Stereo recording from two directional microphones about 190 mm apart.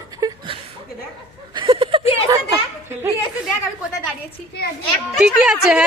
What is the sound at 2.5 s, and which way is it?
Children playing, 10° right (ahead or behind).